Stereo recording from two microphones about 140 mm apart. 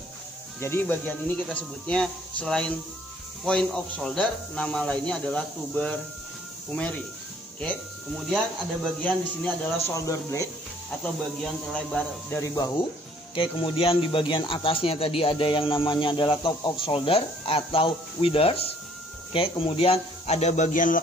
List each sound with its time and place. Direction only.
0.6 s speech: 15° left (ahead or behind)
9.0 s speech: 10° left (ahead or behind)
11.4 s speech: 5° left (ahead or behind)
12.3 s speech: 20° left (ahead or behind)
13.3 s a man's voice: 40° left (ahead or behind); by 21.0 s 70° left (ahead or behind)